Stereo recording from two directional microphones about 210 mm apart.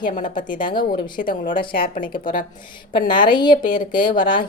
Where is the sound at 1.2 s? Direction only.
40° left (ahead or behind).